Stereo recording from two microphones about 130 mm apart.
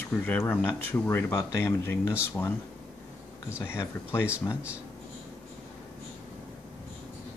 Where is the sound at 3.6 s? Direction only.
20° left (ahead or behind).